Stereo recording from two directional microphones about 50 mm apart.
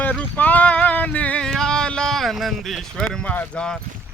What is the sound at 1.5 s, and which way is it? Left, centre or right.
Speech, centre.